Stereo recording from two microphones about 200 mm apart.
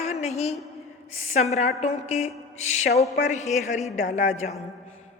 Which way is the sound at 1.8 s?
35° left (ahead or behind).